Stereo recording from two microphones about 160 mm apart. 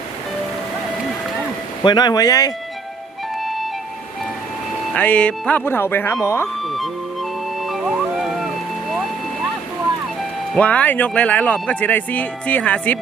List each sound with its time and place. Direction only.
1.8 s speech: 25° left (ahead or behind)
3.4 s music: centre (ahead or behind)
4.9 s speech: 10° left (ahead or behind)
6.6 s music: centre (ahead or behind)
10.5 s speech: 10° left (ahead or behind)